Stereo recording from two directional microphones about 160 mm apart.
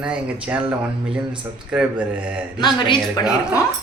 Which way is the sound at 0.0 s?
5° right (ahead or behind).